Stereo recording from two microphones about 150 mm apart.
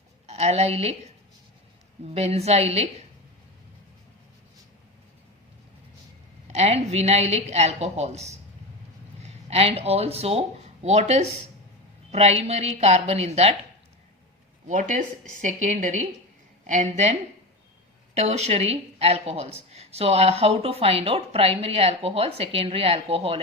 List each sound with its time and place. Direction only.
0.3 s a woman's voice: 45° right (ahead or behind)
2.1 s a woman's voice: 45° right (ahead or behind)
6.5 s a woman's voice: 45° right (ahead or behind)
14.7 s a woman's voice: 55° right (ahead or behind); by 23.4 s 40° right (ahead or behind)